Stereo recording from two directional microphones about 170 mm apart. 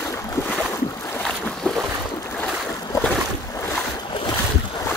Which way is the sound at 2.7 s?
15° left (ahead or behind).